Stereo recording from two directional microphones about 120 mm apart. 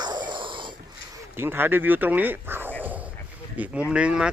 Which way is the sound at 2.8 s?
15° right (ahead or behind).